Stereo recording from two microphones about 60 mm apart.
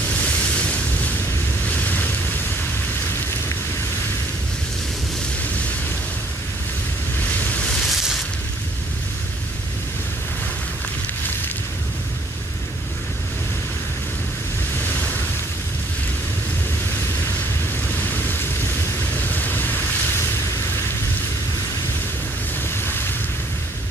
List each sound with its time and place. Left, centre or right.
0.1 s a sound: left
1.7 s waves: left
7.2 s ocean: left
7.6 s a sound: centre
14.8 s ocean: left
17.8 s vehicle: left
22.7 s ocean: left